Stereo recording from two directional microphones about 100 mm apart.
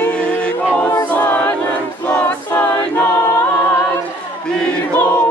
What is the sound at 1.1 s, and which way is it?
Choir, 15° left (ahead or behind).